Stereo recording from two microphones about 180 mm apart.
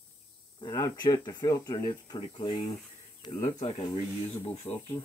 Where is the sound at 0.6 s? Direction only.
25° left (ahead or behind).